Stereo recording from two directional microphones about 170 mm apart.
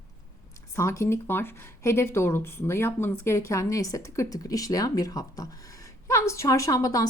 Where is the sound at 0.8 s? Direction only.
15° left (ahead or behind).